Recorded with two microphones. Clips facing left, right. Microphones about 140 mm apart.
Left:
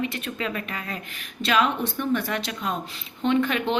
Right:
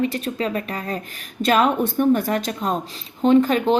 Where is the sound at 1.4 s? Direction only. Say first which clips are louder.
Right 5 dB; 45° right (ahead or behind).